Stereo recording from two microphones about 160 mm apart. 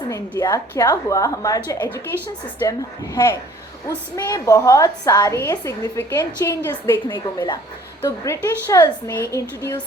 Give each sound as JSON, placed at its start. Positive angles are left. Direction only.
{"t": 0.1, "sound": "a woman's voice", "side_deg": 20}